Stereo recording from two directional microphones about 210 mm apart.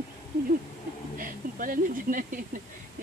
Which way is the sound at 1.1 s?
40° right (ahead or behind).